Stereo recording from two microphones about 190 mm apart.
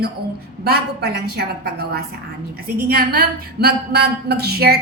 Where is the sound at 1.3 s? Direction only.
55° right (ahead or behind).